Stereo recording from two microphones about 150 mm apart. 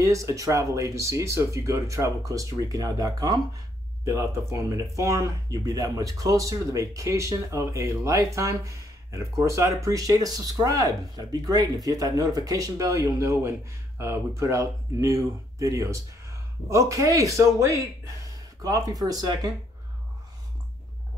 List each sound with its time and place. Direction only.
0.0 s speech: 20° right (ahead or behind)